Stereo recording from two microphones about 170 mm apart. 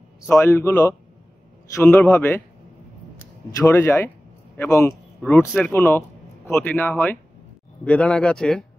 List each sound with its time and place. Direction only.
0.3 s a man's voice: 15° left (ahead or behind)
3.5 s a man's voice: 15° left (ahead or behind)